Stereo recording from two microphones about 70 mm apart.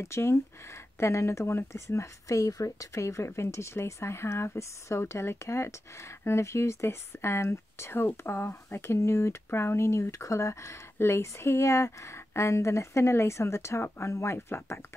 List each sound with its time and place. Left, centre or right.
0.0 s speech: left